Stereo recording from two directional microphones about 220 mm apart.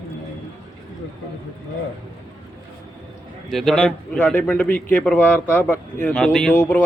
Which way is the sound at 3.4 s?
Centre (ahead or behind).